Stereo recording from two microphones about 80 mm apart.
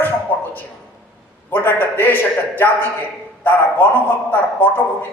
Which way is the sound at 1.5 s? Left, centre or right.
Left.